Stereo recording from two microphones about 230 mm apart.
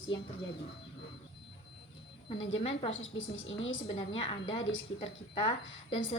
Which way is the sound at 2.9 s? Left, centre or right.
Left.